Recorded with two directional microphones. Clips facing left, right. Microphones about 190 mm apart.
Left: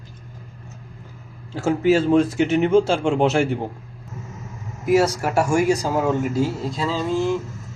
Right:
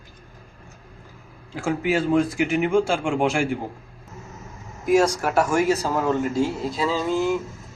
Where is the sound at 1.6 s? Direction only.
25° left (ahead or behind).